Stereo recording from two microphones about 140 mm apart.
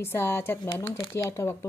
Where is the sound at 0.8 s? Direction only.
40° left (ahead or behind).